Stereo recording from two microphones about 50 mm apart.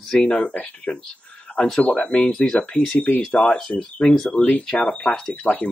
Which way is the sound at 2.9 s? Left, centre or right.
Left.